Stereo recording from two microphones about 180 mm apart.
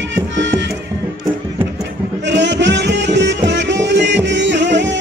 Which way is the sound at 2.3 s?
80° right.